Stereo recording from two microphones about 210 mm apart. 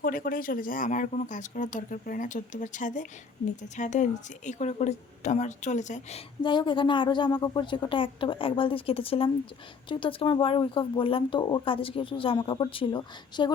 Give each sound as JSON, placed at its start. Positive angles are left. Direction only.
{"t": 0.0, "sound": "a woman's voice", "side_deg": 40}